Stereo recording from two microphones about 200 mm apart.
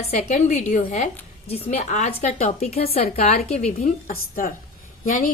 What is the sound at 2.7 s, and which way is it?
Speech, 50° left (ahead or behind).